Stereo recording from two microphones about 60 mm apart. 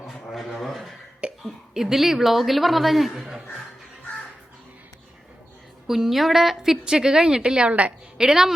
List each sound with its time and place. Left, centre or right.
0.0 s a sound: centre
1.2 s cough: centre
1.7 s a woman's voice: centre
5.9 s a woman's voice: centre; by 7.9 s right
8.2 s a woman's voice: centre